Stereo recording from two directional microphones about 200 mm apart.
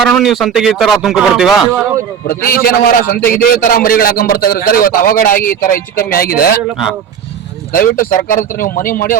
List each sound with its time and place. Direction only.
0.0 s speech: centre (ahead or behind)
2.2 s a man's voice: 45° left (ahead or behind)
7.7 s a man's voice: 45° left (ahead or behind)